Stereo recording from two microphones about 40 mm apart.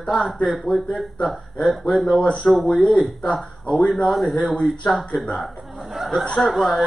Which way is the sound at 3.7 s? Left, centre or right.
Left.